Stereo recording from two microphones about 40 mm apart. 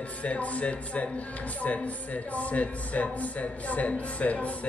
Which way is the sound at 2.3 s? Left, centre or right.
Left.